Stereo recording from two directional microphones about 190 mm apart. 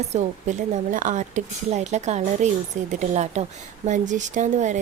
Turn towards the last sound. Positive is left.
turn(degrees=-40)  # may be behind; listen again after turning